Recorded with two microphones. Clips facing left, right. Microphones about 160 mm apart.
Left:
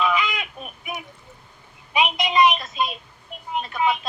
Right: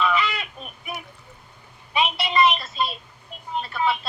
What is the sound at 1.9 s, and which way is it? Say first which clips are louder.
Child singing: left 2 dB; 15° left (ahead or behind).